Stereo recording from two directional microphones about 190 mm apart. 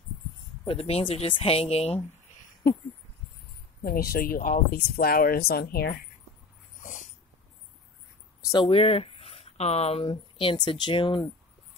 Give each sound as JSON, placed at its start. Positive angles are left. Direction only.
{"t": 0.7, "sound": "speech", "side_deg": 30}
{"t": 2.6, "sound": "speech", "side_deg": 50}
{"t": 3.8, "sound": "speech", "side_deg": 55}
{"t": 6.8, "sound": "dog", "side_deg": 40}
{"t": 8.6, "sound": "speech", "side_deg": 30}